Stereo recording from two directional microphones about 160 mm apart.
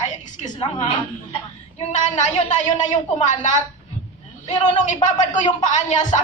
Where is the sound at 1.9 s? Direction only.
50° left (ahead or behind).